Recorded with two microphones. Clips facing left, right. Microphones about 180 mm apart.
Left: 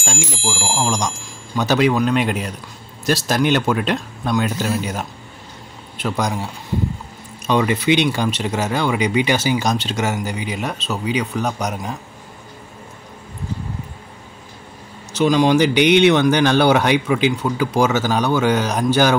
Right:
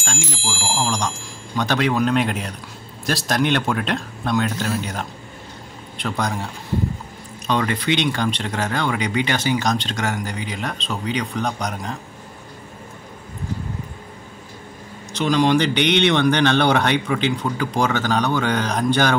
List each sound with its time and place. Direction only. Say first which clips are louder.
0.5 s a sound: left 2 dB; 10° left (ahead or behind)
1.6 s speech: left 3 dB; 5° left (ahead or behind)
15.1 s speech: left 3 dB; 5° left (ahead or behind)